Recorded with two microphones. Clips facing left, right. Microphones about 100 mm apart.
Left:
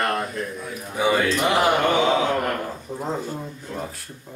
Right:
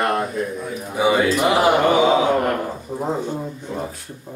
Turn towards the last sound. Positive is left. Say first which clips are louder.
# right 4 dB
turn(degrees=-10)  # may be behind; listen again after turning